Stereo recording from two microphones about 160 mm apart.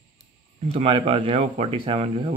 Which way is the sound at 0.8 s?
35° right (ahead or behind).